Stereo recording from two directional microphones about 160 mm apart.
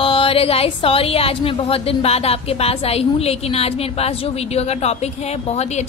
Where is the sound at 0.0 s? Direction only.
35° left (ahead or behind).